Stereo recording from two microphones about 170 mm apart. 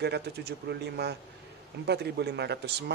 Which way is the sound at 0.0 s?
75° right (ahead or behind).